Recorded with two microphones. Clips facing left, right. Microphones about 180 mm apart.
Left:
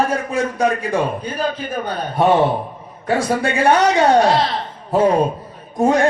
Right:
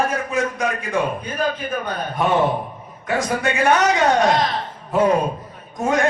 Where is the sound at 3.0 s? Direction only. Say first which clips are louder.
Left 3 dB; 30° left (ahead or behind).